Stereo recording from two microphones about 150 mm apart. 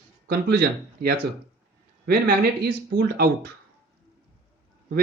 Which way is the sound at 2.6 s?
90° right.